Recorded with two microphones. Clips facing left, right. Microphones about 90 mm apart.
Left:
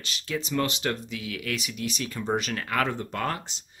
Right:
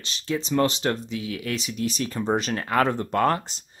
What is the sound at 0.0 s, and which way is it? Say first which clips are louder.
Speech: right 4 dB; 30° right (ahead or behind).